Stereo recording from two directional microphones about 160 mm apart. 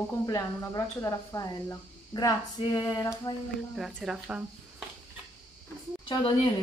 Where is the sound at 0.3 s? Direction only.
20° left (ahead or behind).